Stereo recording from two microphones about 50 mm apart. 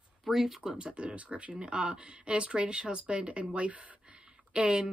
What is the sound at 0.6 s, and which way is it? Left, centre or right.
Speech, right.